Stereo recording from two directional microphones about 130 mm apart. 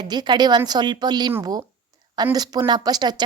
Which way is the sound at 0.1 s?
35° right (ahead or behind).